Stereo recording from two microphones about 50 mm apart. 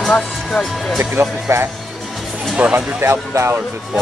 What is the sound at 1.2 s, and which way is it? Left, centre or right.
Speech, right.